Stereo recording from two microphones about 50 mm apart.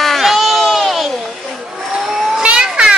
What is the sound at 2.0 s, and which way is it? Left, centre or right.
Cat, centre.